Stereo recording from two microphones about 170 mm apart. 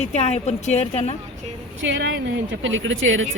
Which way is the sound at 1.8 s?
90° right.